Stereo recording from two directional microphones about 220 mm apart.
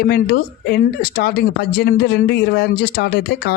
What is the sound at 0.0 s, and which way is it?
Speech, 45° left (ahead or behind).